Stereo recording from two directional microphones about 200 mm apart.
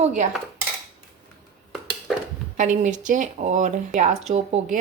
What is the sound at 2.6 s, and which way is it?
Speech, 40° right (ahead or behind).